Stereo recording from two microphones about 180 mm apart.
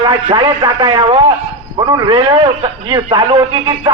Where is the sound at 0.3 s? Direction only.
30° right (ahead or behind).